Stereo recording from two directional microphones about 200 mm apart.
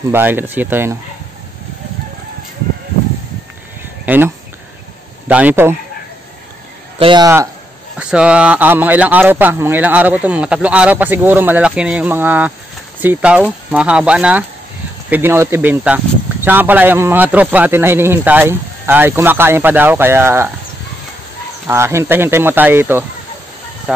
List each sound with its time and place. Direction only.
0.1 s speech: 10° right (ahead or behind)
4.0 s a sound: 10° right (ahead or behind)
5.3 s speech: 10° right (ahead or behind)
7.0 s speech: 25° right (ahead or behind)
8.0 s speech: 5° right (ahead or behind)
21.6 s speech: 15° right (ahead or behind)